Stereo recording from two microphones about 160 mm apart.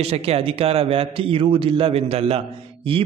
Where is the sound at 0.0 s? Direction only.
40° right (ahead or behind).